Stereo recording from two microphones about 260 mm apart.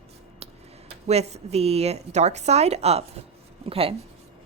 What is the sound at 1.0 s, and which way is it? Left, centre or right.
A woman's voice, right.